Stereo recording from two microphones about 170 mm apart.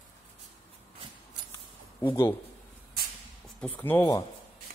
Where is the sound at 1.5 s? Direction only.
20° left (ahead or behind).